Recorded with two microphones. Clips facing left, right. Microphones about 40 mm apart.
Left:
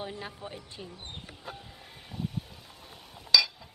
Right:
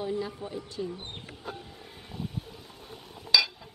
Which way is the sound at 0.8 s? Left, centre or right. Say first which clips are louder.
Right 13 dB; centre.